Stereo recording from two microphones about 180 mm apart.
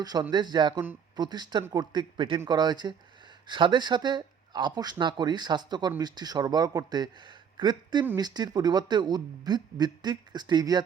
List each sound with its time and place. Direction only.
0.0 s speech: 20° right (ahead or behind)